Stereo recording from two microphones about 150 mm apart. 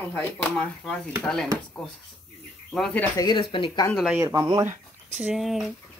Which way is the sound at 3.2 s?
30° left (ahead or behind).